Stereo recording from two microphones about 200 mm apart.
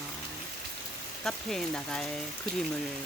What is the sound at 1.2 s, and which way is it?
Speech, 5° left (ahead or behind).